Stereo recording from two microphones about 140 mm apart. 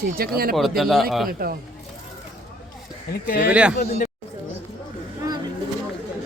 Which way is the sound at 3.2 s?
90° left.